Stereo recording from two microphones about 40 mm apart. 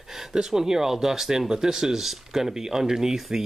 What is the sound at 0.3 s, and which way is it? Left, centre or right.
Speech, centre.